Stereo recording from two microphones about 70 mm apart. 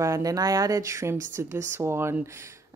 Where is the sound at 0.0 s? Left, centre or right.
Right.